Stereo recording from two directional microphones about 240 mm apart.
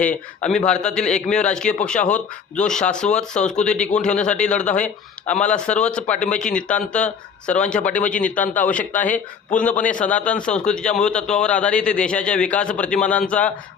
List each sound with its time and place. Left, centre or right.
0.0 s a man's voice: centre
5.8 s a man's voice: centre